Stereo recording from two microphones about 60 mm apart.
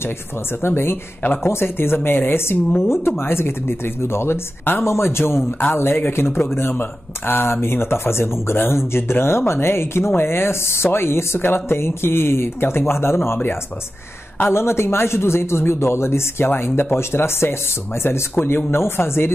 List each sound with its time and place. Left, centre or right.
0.6 s speech: left
1.2 s speech: left
18.7 s speech: left